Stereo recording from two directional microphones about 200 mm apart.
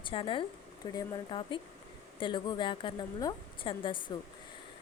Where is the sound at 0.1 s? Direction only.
25° left (ahead or behind).